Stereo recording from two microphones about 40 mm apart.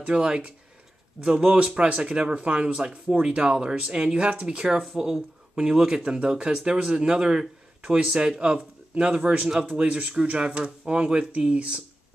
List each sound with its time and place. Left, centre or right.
0.0 s speech: right
9.8 s speech: right
10.1 s speech: right